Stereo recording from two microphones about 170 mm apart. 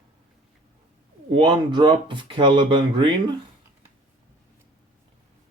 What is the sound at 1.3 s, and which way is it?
Speech, 30° right (ahead or behind).